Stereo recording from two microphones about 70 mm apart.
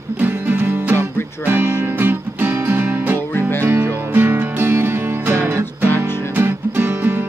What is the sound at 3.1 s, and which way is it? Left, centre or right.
Music, left.